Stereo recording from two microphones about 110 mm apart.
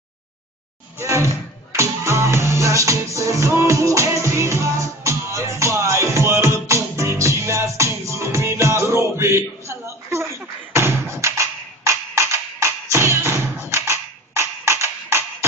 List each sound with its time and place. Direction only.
0.9 s music: 25° right (ahead or behind)